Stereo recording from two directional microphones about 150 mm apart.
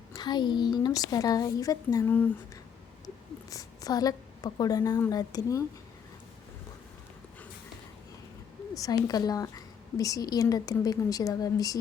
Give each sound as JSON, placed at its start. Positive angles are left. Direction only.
{"t": 0.1, "sound": "a woman's voice", "side_deg": 30}
{"t": 3.5, "sound": "a woman's voice", "side_deg": 25}
{"t": 8.7, "sound": "a woman's voice", "side_deg": 25}